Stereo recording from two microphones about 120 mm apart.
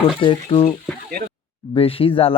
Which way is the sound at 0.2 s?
45° left (ahead or behind).